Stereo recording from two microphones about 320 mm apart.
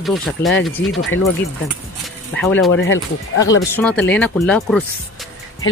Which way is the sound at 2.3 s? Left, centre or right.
Centre.